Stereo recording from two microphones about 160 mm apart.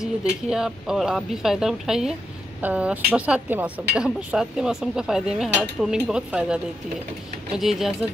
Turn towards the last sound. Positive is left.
turn(degrees=0)  # may be behind; listen again after turning